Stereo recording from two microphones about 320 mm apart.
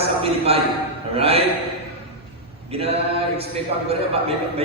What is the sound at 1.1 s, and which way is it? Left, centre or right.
Mantra, centre.